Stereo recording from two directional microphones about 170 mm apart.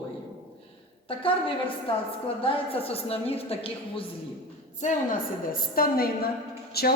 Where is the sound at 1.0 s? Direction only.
30° left (ahead or behind).